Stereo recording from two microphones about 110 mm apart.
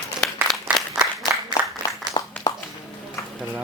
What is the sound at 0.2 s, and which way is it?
Applause, 5° left (ahead or behind).